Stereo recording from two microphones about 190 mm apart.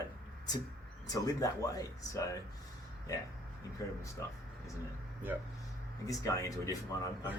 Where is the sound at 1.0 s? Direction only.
20° left (ahead or behind).